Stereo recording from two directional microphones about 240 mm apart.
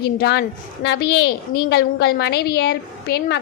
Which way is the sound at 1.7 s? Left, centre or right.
Left.